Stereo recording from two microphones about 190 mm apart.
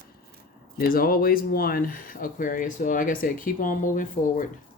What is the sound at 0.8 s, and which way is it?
Speech, 50° left (ahead or behind).